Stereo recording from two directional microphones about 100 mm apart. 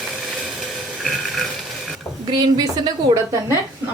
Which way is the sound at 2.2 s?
45° right (ahead or behind).